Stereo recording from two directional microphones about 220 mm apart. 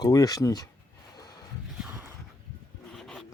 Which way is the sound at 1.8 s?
10° right (ahead or behind).